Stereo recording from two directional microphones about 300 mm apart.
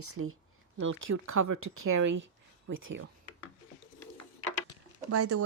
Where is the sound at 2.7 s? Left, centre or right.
Right.